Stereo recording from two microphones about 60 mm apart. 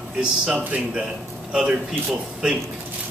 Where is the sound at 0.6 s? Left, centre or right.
Right.